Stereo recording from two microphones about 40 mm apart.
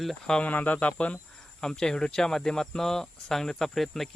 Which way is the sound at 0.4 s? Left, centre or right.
Left.